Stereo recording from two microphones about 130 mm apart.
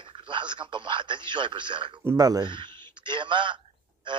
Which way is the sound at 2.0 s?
25° right (ahead or behind).